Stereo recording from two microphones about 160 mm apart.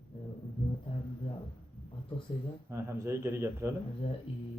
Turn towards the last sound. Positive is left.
turn(degrees=-15)  # may be behind; listen again after turning